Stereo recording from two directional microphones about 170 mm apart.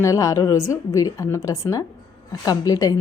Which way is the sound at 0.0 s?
20° left (ahead or behind).